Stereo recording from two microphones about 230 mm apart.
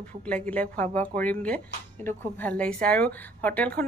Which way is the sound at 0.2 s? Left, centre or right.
Centre.